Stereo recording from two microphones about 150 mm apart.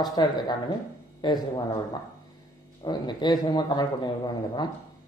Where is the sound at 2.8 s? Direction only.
30° left (ahead or behind).